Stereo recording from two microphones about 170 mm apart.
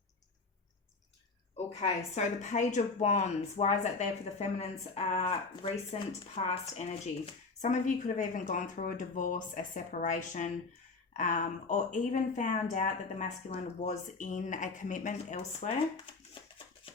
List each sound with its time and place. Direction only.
1.5 s speech: 40° left (ahead or behind)